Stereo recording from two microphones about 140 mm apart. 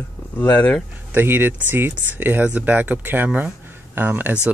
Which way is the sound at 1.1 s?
15° right (ahead or behind).